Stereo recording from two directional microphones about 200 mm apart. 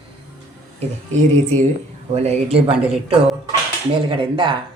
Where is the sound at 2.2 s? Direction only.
30° right (ahead or behind).